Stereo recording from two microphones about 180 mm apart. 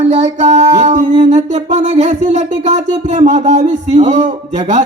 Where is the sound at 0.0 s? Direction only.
40° right (ahead or behind).